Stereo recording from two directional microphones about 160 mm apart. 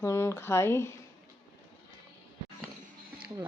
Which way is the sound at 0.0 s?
15° left (ahead or behind).